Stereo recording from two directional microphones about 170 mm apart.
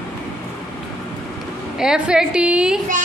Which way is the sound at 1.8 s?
5° right (ahead or behind).